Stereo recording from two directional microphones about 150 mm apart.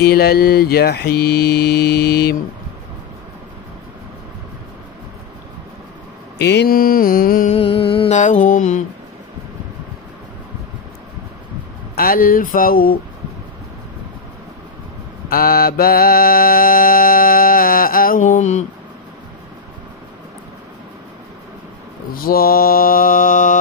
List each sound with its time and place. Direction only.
0.0 s mantra: 90° left
6.3 s mantra: 85° left
7.4 s a sound: 40° left (ahead or behind)
8.1 s mantra: 55° left (ahead or behind)
11.9 s mantra: 75° left (ahead or behind)
15.2 s mantra: 80° left; by 18.7 s 50° left (ahead or behind)
22.1 s mantra: 80° left; by 23.6 s 60° left (ahead or behind)